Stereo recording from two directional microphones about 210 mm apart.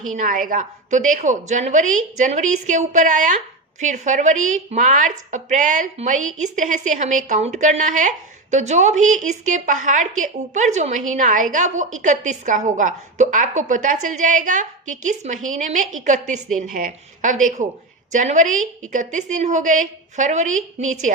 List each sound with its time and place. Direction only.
0.1 s a woman's voice: 40° right (ahead or behind)